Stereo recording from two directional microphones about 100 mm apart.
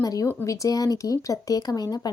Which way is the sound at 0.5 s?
35° left (ahead or behind).